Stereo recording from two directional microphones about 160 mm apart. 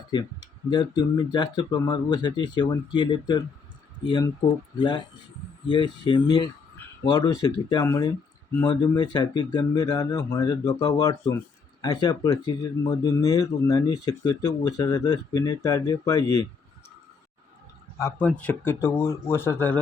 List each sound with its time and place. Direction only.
0.1 s speech: 25° left (ahead or behind)
18.0 s speech: 10° left (ahead or behind)